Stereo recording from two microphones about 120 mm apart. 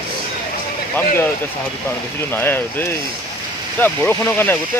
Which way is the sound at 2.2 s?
20° left (ahead or behind).